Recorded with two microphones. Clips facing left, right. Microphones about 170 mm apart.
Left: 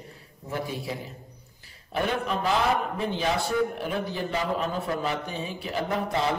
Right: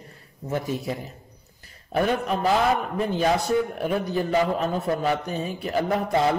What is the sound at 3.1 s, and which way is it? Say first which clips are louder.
A man's voice: right 6 dB; 45° right (ahead or behind).